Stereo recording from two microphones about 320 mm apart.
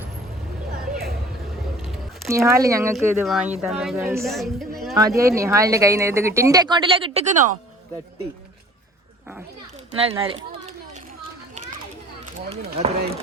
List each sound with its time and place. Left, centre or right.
1.8 s speech: centre
4.9 s speech: centre
10.0 s a child's voice: centre
12.5 s speech: centre